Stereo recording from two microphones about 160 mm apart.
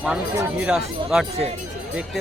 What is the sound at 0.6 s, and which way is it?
Speech, 5° right (ahead or behind).